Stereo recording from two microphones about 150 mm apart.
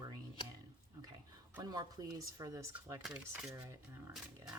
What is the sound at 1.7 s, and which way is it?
Speech, 25° right (ahead or behind).